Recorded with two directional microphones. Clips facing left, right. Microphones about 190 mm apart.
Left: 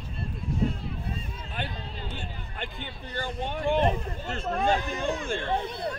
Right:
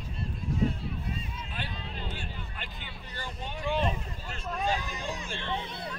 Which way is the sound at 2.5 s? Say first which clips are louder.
Left 6 dB; 50° left (ahead or behind).